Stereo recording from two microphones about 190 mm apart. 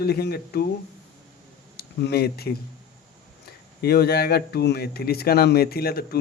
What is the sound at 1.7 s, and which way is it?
Speech, 55° left (ahead or behind).